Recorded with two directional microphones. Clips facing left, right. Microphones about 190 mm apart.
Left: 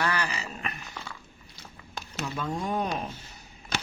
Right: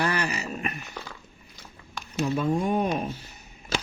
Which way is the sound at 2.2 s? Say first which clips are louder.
Right 8 dB; 35° right (ahead or behind).